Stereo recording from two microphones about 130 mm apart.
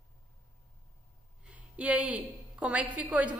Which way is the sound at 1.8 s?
10° right (ahead or behind).